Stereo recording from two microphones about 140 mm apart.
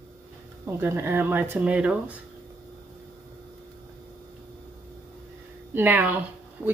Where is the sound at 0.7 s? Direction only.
15° right (ahead or behind).